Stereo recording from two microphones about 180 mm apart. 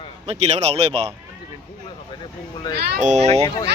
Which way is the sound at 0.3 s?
35° right (ahead or behind).